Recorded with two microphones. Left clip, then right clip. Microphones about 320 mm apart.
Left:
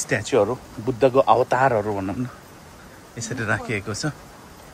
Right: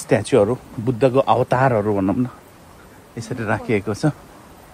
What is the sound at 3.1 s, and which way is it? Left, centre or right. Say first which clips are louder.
Speech: right 1 dB; centre.